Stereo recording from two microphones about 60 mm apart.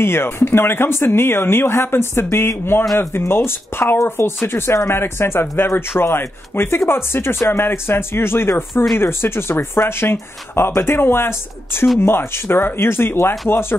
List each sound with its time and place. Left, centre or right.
0.0 s speech: left